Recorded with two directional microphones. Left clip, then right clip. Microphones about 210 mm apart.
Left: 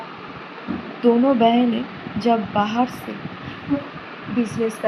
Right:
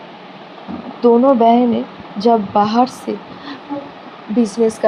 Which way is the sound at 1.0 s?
35° right (ahead or behind).